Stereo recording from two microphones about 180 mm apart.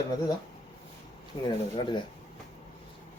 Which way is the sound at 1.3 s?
30° left (ahead or behind).